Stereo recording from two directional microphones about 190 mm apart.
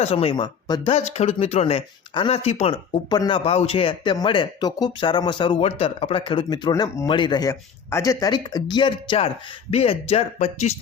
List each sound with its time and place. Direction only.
0.0 s a man's voice: 30° left (ahead or behind)